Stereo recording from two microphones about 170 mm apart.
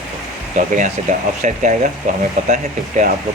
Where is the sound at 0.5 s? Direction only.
45° right (ahead or behind).